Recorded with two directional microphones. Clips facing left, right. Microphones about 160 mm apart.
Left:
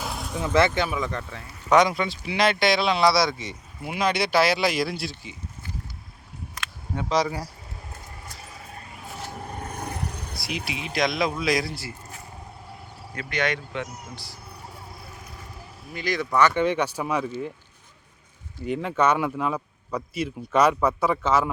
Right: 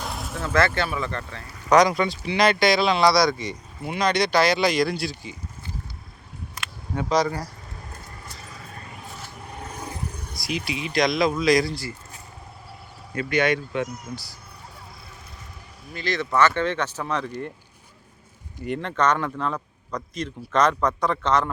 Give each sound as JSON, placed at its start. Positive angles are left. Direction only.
{"t": 0.0, "sound": "vehicle", "side_deg": 0}
{"t": 0.3, "sound": "speech", "side_deg": 15}
{"t": 7.1, "sound": "speech", "side_deg": 5}
{"t": 9.4, "sound": "vehicle", "side_deg": 55}
{"t": 10.5, "sound": "speech", "side_deg": 0}
{"t": 13.3, "sound": "speech", "side_deg": -10}
{"t": 16.0, "sound": "speech", "side_deg": 15}
{"t": 18.6, "sound": "speech", "side_deg": 5}